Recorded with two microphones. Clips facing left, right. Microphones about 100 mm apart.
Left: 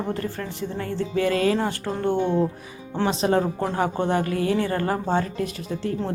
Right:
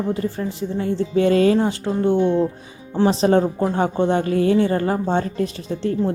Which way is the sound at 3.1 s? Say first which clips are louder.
Right 4 dB; 30° right (ahead or behind).